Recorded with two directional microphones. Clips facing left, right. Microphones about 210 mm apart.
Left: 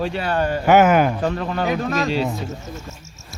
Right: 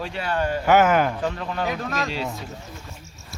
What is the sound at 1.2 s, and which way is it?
Speech, 55° left (ahead or behind).